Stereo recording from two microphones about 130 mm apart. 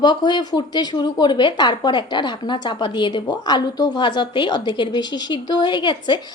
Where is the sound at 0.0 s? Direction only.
35° left (ahead or behind).